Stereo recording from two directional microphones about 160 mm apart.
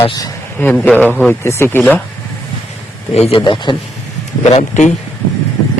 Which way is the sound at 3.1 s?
40° left (ahead or behind).